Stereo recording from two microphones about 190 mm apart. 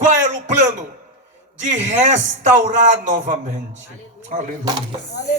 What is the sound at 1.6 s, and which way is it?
A man's voice, 40° right (ahead or behind).